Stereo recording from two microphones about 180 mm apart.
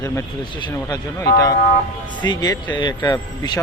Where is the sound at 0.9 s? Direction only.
20° left (ahead or behind).